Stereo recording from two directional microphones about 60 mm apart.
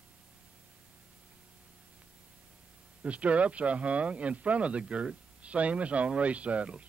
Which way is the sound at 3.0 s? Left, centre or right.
Right.